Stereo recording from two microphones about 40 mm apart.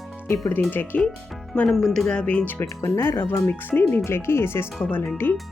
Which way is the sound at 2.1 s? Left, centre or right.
Left.